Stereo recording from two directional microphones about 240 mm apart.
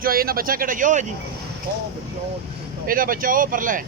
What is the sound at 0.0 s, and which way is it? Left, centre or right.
Speech, right.